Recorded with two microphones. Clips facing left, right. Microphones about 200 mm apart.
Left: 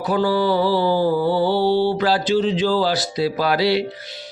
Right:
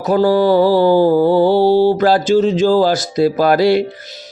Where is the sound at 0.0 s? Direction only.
45° right (ahead or behind).